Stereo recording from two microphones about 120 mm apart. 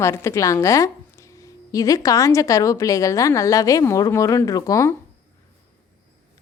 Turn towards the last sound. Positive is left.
turn(degrees=25)  # may be behind; listen again after turning